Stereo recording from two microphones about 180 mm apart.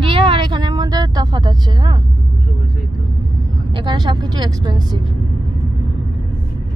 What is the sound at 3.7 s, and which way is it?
A woman's voice, 25° right (ahead or behind).